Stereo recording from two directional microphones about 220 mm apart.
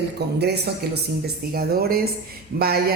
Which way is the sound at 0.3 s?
50° right (ahead or behind).